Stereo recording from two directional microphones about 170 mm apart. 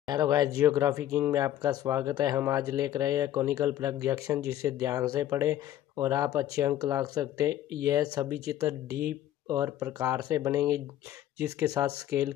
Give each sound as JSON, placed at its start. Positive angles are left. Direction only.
{"t": 0.0, "sound": "speech", "side_deg": -20}